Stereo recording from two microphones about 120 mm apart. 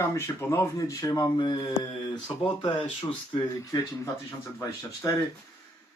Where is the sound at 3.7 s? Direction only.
30° left (ahead or behind).